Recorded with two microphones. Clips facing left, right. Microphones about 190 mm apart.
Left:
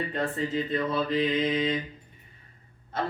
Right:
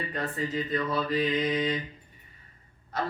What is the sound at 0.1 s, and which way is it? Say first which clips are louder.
Mantra: left 3 dB; 25° left (ahead or behind).